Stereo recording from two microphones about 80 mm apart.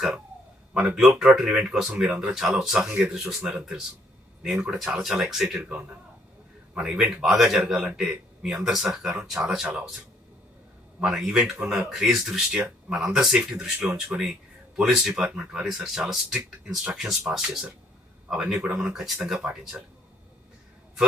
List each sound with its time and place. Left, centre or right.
0.7 s speech: centre
11.0 s speech: centre